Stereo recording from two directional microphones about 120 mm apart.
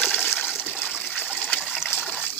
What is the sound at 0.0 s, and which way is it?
Toilet flush, 15° left (ahead or behind).